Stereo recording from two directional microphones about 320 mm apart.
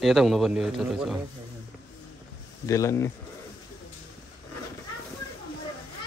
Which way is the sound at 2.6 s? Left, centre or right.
Centre.